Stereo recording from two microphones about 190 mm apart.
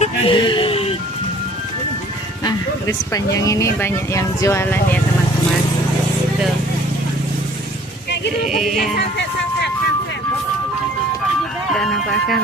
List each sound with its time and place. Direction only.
0.0 s music: 25° left (ahead or behind)
2.4 s speech: 15° left (ahead or behind)
8.5 s speech: centre (ahead or behind)
11.7 s speech: centre (ahead or behind)